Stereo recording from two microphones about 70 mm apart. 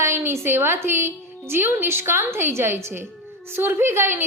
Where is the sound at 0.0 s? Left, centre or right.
Right.